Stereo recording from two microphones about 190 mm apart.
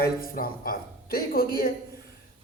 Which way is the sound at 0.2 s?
50° left (ahead or behind).